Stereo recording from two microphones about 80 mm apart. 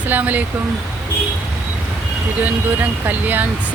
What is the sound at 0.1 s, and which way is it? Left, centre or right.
Speech, right.